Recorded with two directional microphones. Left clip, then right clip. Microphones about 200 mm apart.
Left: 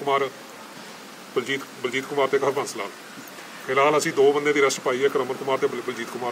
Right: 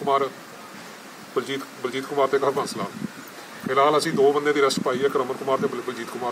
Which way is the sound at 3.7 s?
10° left (ahead or behind).